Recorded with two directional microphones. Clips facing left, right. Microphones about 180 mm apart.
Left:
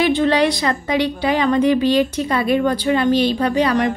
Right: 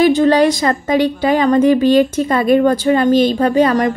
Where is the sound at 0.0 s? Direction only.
45° right (ahead or behind).